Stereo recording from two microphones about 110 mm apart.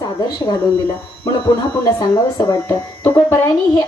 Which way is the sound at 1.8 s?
35° left (ahead or behind).